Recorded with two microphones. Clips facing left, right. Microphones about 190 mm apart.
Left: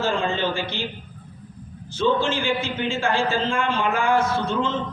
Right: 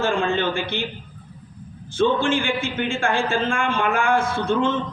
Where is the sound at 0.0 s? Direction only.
55° right (ahead or behind).